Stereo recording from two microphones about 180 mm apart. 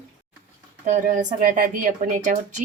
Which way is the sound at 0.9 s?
45° right (ahead or behind).